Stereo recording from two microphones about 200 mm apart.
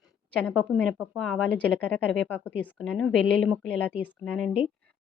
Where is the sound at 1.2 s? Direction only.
5° left (ahead or behind).